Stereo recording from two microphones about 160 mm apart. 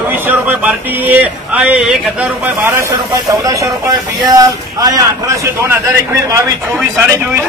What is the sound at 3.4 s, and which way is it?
Speech, 20° right (ahead or behind).